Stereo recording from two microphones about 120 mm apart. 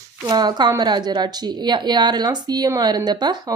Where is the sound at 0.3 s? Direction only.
35° right (ahead or behind).